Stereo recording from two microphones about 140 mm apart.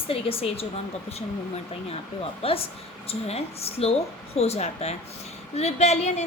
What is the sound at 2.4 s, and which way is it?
A woman's voice, 45° left (ahead or behind).